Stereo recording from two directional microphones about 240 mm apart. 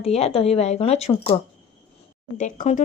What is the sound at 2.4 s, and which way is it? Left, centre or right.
Speech, left.